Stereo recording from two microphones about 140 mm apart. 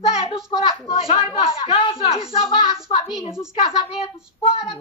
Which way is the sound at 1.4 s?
40° left (ahead or behind).